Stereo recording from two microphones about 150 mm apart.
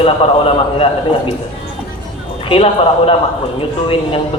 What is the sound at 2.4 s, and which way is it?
Horse, 35° left (ahead or behind).